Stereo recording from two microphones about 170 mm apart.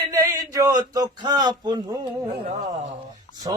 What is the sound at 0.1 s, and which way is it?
Speech, 20° right (ahead or behind).